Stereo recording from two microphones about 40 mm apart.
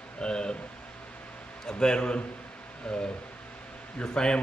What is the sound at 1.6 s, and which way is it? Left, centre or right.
Speech, centre.